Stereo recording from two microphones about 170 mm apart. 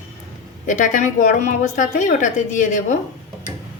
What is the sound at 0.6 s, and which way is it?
A woman's voice, 45° left (ahead or behind).